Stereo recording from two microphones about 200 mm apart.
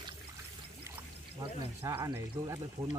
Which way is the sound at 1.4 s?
15° right (ahead or behind).